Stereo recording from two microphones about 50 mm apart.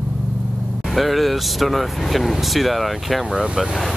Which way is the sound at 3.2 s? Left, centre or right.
Centre.